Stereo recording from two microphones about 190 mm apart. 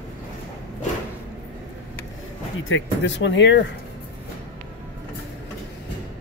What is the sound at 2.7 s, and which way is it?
Speech, 70° left (ahead or behind).